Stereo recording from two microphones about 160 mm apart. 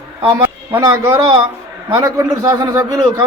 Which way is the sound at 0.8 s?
20° right (ahead or behind).